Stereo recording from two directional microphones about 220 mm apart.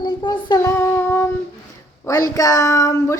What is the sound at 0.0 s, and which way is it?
Child singing, 20° left (ahead or behind).